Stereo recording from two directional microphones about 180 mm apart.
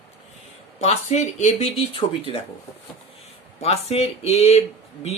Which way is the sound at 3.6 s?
35° left (ahead or behind).